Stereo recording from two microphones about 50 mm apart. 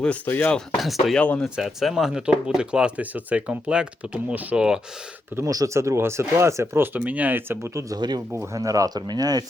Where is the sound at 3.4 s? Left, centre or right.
Centre.